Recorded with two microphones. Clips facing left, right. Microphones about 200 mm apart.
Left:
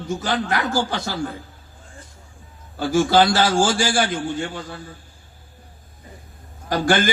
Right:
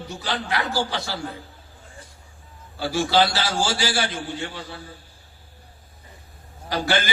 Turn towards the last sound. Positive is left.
turn(degrees=50)  # may be behind; listen again after turning